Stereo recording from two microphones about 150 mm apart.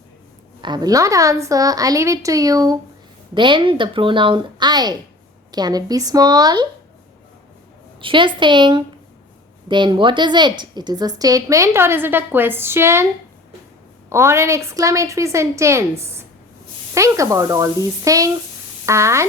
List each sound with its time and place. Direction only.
0.6 s a woman's voice: 30° right (ahead or behind)
8.0 s a woman's voice: 35° right (ahead or behind); by 13.1 s 15° right (ahead or behind)
14.1 s a woman's voice: 20° right (ahead or behind)